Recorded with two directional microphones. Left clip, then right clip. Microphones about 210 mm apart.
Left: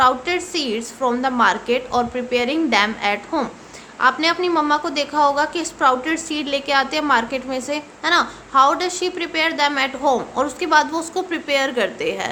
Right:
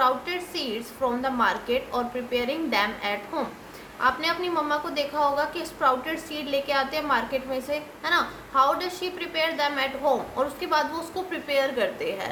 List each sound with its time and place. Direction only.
0.0 s a woman's voice: 50° left (ahead or behind)